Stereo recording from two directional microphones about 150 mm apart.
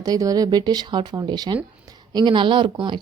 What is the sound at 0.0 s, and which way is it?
A woman's voice, 25° right (ahead or behind).